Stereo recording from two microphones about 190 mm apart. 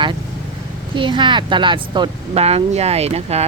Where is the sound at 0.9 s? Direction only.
25° right (ahead or behind).